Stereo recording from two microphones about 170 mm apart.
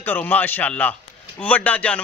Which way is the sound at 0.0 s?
10° left (ahead or behind).